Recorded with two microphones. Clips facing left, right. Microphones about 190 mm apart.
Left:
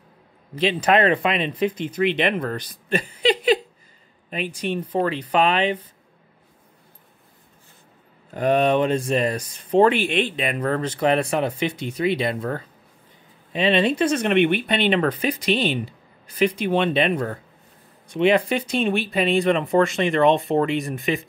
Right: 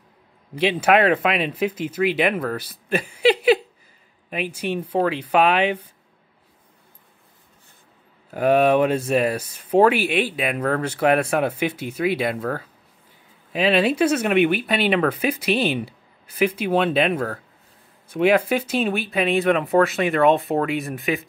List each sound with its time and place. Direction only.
0.6 s speech: 10° right (ahead or behind)
8.3 s speech: 5° right (ahead or behind)